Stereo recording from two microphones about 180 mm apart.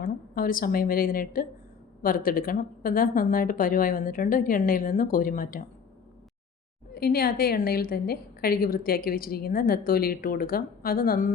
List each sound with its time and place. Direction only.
0.0 s a woman's voice: 50° left (ahead or behind)
6.9 s a woman's voice: 55° left (ahead or behind)